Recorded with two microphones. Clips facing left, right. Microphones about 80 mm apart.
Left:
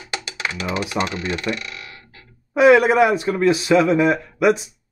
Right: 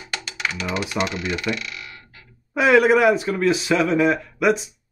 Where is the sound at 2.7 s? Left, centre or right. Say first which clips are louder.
Even; centre.